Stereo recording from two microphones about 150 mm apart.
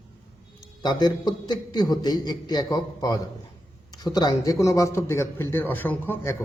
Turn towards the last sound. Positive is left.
turn(degrees=15)  # may be behind; listen again after turning